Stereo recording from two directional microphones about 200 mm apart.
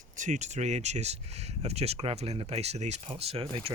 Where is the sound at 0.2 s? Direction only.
35° right (ahead or behind).